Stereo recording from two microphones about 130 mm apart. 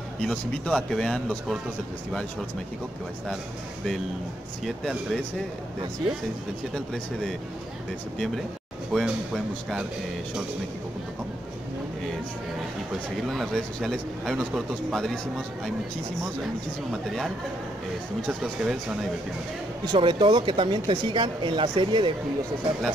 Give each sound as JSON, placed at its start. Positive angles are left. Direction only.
{"t": 0.2, "sound": "speech", "side_deg": 5}
{"t": 4.6, "sound": "speech", "side_deg": 0}
{"t": 6.7, "sound": "speech", "side_deg": 5}
{"t": 8.9, "sound": "speech", "side_deg": 0}
{"t": 13.3, "sound": "speech", "side_deg": 0}
{"t": 16.9, "sound": "speech", "side_deg": 0}
{"t": 18.4, "sound": "speech", "side_deg": -5}
{"t": 19.8, "sound": "speech", "side_deg": -35}